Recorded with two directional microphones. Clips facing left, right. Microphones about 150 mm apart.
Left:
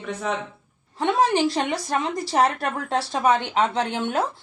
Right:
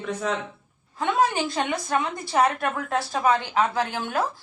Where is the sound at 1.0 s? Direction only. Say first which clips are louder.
Left 3 dB; 30° left (ahead or behind).